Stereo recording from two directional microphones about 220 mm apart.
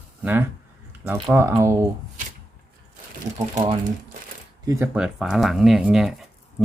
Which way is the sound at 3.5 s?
20° right (ahead or behind).